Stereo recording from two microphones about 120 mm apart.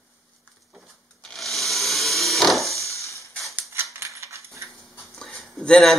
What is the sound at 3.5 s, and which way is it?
Typewriter, 20° right (ahead or behind).